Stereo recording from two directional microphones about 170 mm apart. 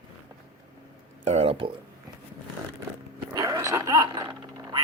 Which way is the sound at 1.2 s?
40° right (ahead or behind).